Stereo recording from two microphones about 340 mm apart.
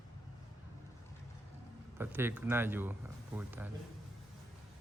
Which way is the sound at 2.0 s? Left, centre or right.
Centre.